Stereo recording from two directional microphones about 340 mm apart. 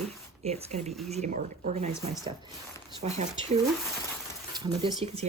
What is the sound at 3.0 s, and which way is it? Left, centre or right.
Speech, centre.